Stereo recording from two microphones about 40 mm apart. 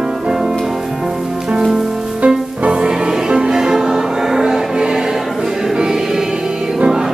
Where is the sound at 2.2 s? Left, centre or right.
Right.